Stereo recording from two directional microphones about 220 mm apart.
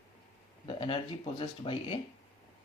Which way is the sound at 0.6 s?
20° left (ahead or behind).